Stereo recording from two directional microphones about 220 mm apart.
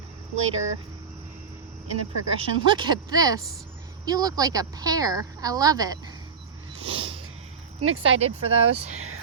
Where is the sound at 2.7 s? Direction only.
20° right (ahead or behind).